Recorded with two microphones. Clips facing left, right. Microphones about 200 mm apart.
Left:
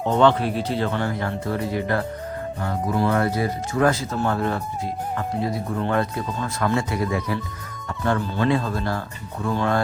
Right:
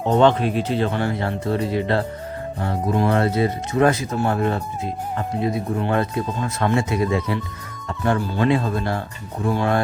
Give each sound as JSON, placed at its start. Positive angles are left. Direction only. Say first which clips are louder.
{"t": 0.1, "sound": "speech", "louder": "right 2 dB", "side_deg": -20}